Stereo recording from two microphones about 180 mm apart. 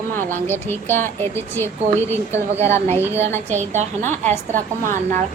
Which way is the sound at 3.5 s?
40° right (ahead or behind).